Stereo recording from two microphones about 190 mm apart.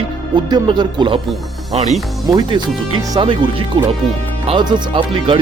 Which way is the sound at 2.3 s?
25° right (ahead or behind).